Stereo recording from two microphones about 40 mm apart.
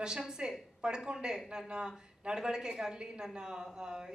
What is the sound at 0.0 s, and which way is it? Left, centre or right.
A woman's voice, centre.